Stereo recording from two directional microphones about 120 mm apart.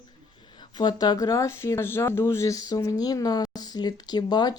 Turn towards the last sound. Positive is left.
turn(degrees=35)  # may be behind; listen again after turning